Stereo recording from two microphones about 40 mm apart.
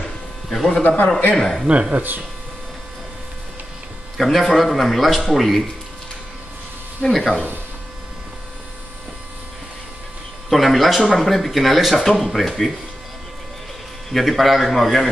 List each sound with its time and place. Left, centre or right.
0.5 s speech: centre
1.7 s speech: right
4.2 s speech: centre
7.0 s speech: centre
10.5 s speech: centre
14.1 s speech: centre